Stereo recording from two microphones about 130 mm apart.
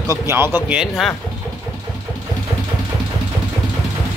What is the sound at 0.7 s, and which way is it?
Speech, centre (ahead or behind).